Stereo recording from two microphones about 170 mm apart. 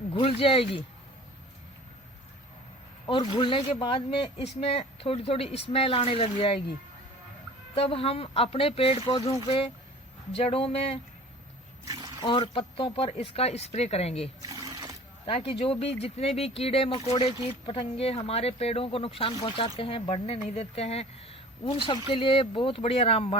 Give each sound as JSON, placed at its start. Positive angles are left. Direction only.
{"t": 0.1, "sound": "speech", "side_deg": 30}
{"t": 3.1, "sound": "speech", "side_deg": 30}
{"t": 7.8, "sound": "speech", "side_deg": 35}
{"t": 10.3, "sound": "speech", "side_deg": 35}
{"t": 11.9, "sound": "a sound", "side_deg": -20}
{"t": 12.2, "sound": "speech", "side_deg": 25}
{"t": 14.4, "sound": "a sound", "side_deg": -20}
{"t": 15.3, "sound": "speech", "side_deg": 35}